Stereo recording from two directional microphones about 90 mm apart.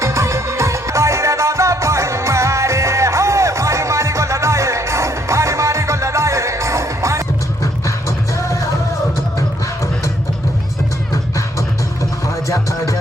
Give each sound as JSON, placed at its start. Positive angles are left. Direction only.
{"t": 0.0, "sound": "music", "side_deg": -35}
{"t": 7.6, "sound": "music", "side_deg": 35}
{"t": 12.5, "sound": "music", "side_deg": 35}